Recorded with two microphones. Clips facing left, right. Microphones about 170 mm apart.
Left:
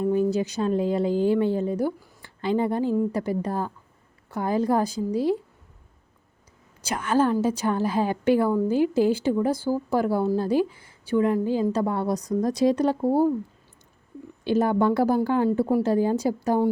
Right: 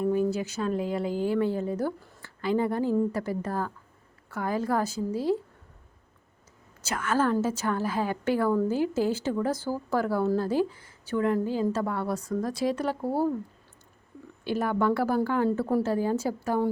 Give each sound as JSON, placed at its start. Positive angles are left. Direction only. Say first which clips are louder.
{"t": 0.0, "sound": "a woman's voice", "louder": "left 3 dB", "side_deg": 25}
{"t": 6.8, "sound": "a woman's voice", "louder": "left 4 dB", "side_deg": 15}
{"t": 14.4, "sound": "a woman's voice", "louder": "left 5 dB", "side_deg": 20}